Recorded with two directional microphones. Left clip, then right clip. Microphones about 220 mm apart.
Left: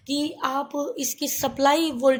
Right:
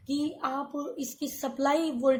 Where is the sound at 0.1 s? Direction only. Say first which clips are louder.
Left 5 dB; 40° left (ahead or behind).